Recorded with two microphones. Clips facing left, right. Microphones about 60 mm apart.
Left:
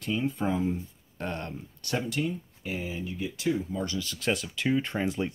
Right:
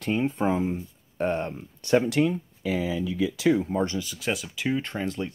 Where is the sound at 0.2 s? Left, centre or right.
Right.